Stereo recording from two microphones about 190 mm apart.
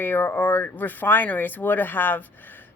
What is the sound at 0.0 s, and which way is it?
Speech, 10° left (ahead or behind).